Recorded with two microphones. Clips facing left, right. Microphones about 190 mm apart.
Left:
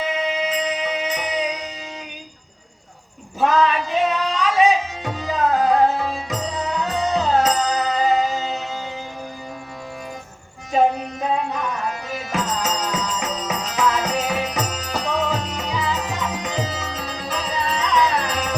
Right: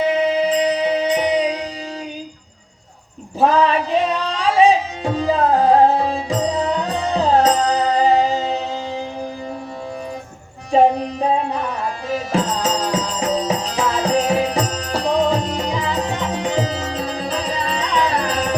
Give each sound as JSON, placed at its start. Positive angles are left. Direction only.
{"t": 0.4, "sound": "music", "side_deg": -30}
{"t": 3.4, "sound": "music", "side_deg": -35}
{"t": 10.7, "sound": "music", "side_deg": -30}